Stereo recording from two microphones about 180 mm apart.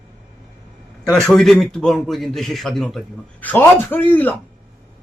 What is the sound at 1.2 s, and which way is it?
A man's voice, centre (ahead or behind).